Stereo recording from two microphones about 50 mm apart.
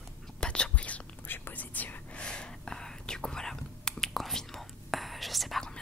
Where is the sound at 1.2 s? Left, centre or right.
Left.